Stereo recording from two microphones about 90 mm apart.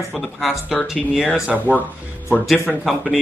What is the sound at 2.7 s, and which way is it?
Speech, 5° left (ahead or behind).